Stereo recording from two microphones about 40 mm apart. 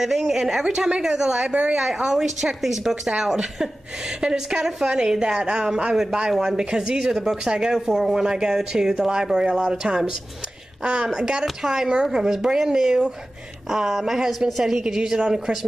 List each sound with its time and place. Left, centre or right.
0.0 s speech: centre
0.7 s speech: right
1.5 s speech: right
1.8 s a woman's voice: centre